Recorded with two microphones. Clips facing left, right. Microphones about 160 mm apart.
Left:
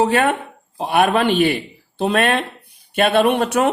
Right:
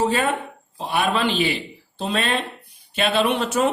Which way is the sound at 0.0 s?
65° left (ahead or behind).